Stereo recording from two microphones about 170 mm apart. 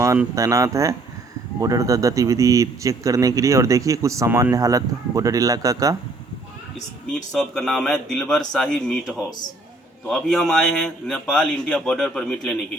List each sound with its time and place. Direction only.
0.0 s a man's voice: 15° right (ahead or behind)
7.3 s a man's voice: 5° left (ahead or behind)